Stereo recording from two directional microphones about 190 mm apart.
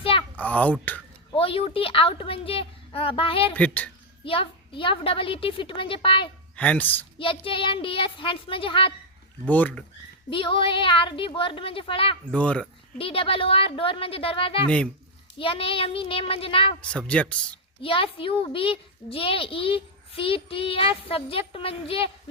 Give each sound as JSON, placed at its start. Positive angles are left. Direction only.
{"t": 0.0, "sound": "a sound", "side_deg": 30}
{"t": 0.3, "sound": "a child's voice", "side_deg": 10}
{"t": 1.3, "sound": "a child's voice", "side_deg": 30}
{"t": 3.5, "sound": "speech", "side_deg": 5}
{"t": 4.2, "sound": "a child's voice", "side_deg": 25}
{"t": 6.6, "sound": "speech", "side_deg": 10}
{"t": 7.2, "sound": "a child's voice", "side_deg": 25}
{"t": 9.5, "sound": "speech", "side_deg": 10}
{"t": 10.2, "sound": "a child's voice", "side_deg": 25}
{"t": 12.3, "sound": "speech", "side_deg": 5}
{"t": 13.0, "sound": "a child's voice", "side_deg": 30}
{"t": 16.9, "sound": "speech", "side_deg": 5}
{"t": 17.8, "sound": "a child's voice", "side_deg": 30}